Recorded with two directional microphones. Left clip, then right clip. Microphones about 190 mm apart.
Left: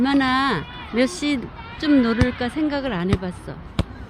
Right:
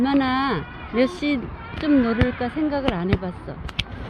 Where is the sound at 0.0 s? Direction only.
25° left (ahead or behind).